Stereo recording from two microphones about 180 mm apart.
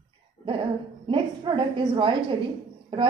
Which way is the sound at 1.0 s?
25° right (ahead or behind).